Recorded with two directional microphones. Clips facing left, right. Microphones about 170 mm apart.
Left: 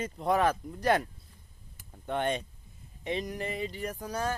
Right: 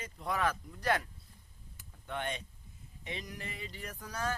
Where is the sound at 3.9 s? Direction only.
35° left (ahead or behind).